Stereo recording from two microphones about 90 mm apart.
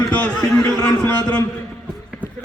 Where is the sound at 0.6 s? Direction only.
35° left (ahead or behind).